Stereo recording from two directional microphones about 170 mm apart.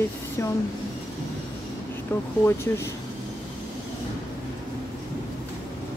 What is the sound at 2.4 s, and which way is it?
Speech, 15° left (ahead or behind).